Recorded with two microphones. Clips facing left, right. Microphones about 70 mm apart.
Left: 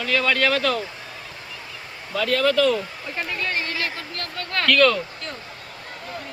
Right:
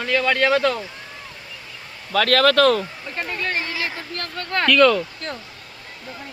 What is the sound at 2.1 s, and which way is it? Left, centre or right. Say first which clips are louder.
Speech: right 4 dB; right.